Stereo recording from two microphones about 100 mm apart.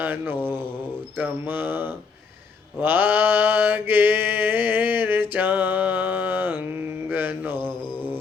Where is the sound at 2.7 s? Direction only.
20° right (ahead or behind).